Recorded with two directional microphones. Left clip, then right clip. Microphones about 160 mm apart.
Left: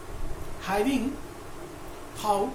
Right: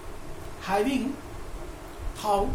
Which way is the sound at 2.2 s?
5° right (ahead or behind).